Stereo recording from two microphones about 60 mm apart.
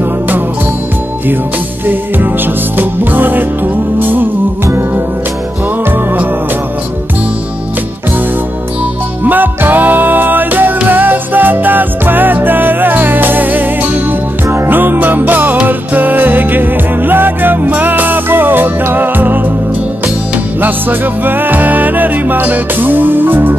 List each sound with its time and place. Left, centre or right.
1.9 s music: right
9.2 s music: right
21.2 s music: right